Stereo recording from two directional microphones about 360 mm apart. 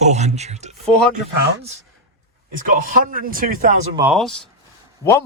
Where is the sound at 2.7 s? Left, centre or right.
Right.